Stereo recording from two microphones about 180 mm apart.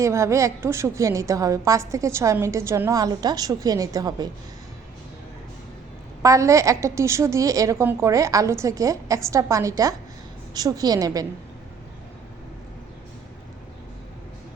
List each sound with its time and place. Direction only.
0.0 s a woman's voice: 15° right (ahead or behind)
6.2 s a woman's voice: 15° right (ahead or behind)